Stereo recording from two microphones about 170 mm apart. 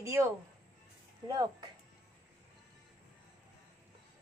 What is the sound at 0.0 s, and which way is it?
Speech, 15° right (ahead or behind).